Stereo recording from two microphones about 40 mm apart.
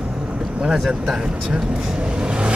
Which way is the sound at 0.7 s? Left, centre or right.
Centre.